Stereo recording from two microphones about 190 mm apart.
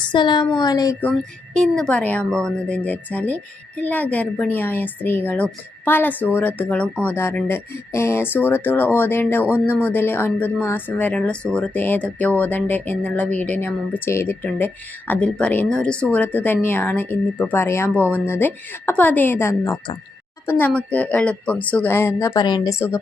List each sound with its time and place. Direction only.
0.1 s speech: 25° left (ahead or behind)
1.5 s a woman's voice: 5° left (ahead or behind)